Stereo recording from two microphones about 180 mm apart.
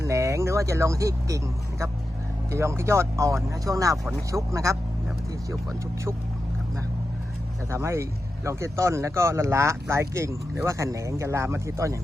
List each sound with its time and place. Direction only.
0.0 s speech: 15° right (ahead or behind)
2.5 s speech: 15° right (ahead or behind)
7.7 s speech: 15° right (ahead or behind)